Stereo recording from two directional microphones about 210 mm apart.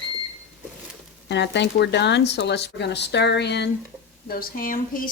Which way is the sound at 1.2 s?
55° left (ahead or behind).